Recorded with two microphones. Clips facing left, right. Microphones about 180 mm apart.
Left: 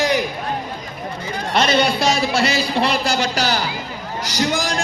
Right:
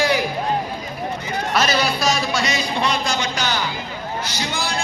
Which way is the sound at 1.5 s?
25° left (ahead or behind).